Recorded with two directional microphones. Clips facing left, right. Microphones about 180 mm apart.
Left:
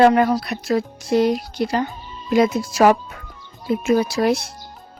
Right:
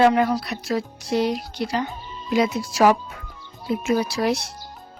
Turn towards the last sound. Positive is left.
turn(degrees=50)  # may be behind; listen again after turning